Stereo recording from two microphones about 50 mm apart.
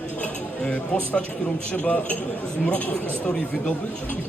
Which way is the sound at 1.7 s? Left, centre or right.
Left.